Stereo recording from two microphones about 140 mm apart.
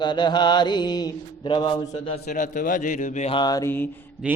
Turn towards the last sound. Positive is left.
turn(degrees=-10)  # may be behind; listen again after turning